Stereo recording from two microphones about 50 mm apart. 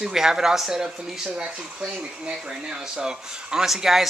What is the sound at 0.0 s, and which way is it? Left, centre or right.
Speech, centre.